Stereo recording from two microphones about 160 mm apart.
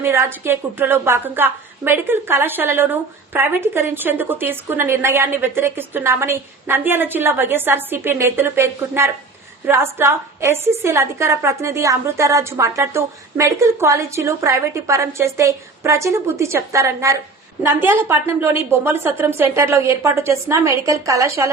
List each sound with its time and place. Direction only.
0.0 s a woman's voice: 15° right (ahead or behind)